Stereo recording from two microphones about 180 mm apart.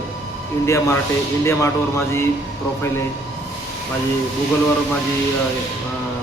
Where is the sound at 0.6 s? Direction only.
15° left (ahead or behind).